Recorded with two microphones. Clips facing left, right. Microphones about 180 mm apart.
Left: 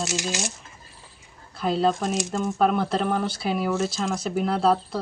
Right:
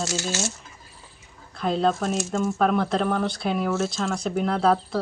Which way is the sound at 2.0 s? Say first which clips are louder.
Even; 15° left (ahead or behind).